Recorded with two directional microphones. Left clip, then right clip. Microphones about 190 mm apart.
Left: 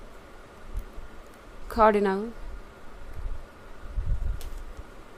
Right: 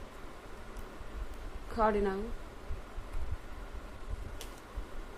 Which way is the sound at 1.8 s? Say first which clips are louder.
Left 9 dB; 60° left (ahead or behind).